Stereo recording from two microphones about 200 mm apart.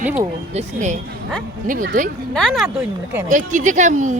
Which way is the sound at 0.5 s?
35° right (ahead or behind).